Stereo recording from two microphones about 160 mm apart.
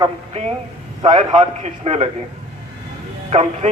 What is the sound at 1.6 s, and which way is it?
Speech, 40° right (ahead or behind).